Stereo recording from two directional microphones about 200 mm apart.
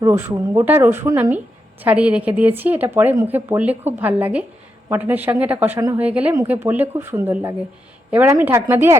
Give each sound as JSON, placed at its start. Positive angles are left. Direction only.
{"t": 0.0, "sound": "a woman's voice", "side_deg": -10}